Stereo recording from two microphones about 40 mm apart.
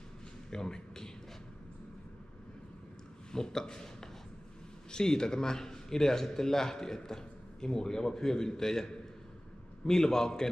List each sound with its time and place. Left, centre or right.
0.5 s speech: centre
3.3 s a man's voice: centre